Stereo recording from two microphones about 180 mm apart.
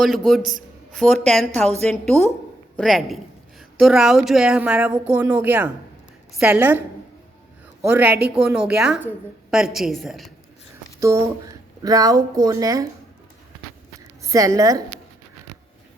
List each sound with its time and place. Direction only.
0.0 s a woman's voice: centre (ahead or behind)
7.9 s a woman's voice: 10° right (ahead or behind)
11.0 s speech: 15° right (ahead or behind)
14.3 s speech: 20° right (ahead or behind)